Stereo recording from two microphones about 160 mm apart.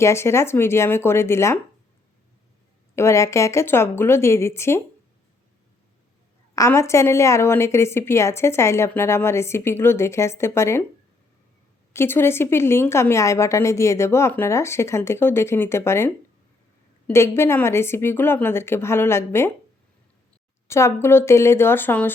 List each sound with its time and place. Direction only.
0.0 s a woman's voice: 15° left (ahead or behind)
2.9 s a woman's voice: 15° left (ahead or behind)
6.6 s a woman's voice: 20° left (ahead or behind)
11.9 s a woman's voice: 15° left (ahead or behind)
20.7 s a woman's voice: 15° left (ahead or behind)